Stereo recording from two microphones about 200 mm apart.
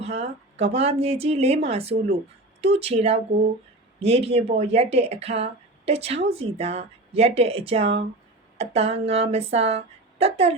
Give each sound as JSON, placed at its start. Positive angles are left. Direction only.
{"t": 0.0, "sound": "speech", "side_deg": -30}